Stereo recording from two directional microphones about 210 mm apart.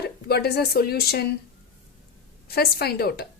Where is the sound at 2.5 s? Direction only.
50° left (ahead or behind).